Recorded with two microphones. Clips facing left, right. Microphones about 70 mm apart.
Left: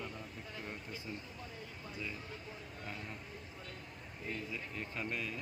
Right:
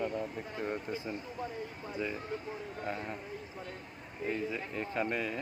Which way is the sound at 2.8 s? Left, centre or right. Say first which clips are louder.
Right 8 dB; right.